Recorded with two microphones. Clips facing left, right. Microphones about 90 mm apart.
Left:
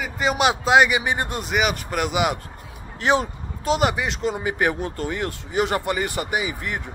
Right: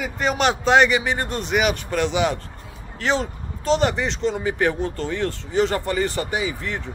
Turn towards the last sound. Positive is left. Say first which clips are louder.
# even
turn(degrees=15)  # may be behind; listen again after turning